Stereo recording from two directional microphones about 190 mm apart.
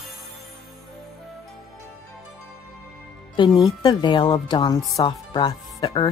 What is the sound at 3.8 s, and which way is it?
Speech, 20° left (ahead or behind).